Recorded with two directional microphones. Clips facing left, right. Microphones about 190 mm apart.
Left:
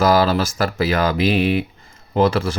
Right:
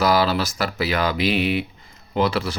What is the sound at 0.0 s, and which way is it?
Speech, 45° left (ahead or behind).